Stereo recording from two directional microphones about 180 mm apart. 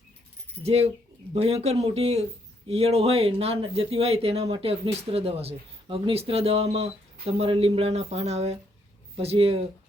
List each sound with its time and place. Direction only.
0.6 s speech: 35° right (ahead or behind)